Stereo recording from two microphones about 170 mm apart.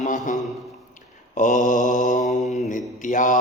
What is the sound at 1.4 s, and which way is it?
Mantra, 50° left (ahead or behind).